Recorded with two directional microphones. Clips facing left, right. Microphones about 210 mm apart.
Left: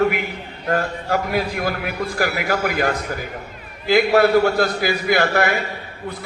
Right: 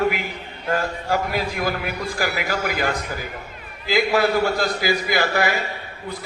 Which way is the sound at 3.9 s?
60° left (ahead or behind).